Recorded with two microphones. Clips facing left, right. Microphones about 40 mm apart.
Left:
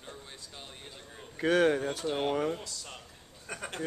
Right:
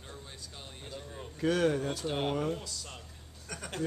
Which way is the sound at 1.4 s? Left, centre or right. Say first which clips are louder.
Left 3 dB; left.